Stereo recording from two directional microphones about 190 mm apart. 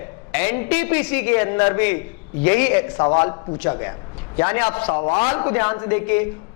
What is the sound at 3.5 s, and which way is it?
Speech, 15° left (ahead or behind).